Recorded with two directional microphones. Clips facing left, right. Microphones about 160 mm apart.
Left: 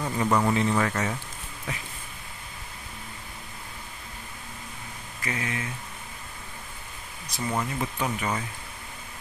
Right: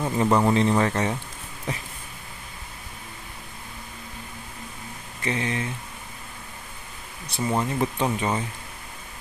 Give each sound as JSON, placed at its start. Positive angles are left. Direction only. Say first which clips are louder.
{"t": 0.0, "sound": "speech", "louder": "right 4 dB", "side_deg": -25}
{"t": 5.2, "sound": "speech", "louder": "right 5 dB", "side_deg": -30}
{"t": 7.2, "sound": "speech", "louder": "right 4 dB", "side_deg": -30}